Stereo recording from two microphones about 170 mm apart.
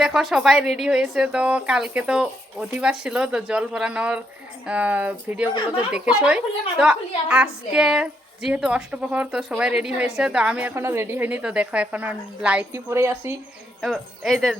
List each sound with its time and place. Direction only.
0.0 s a woman's voice: 5° right (ahead or behind)
13.8 s a woman's voice: centre (ahead or behind)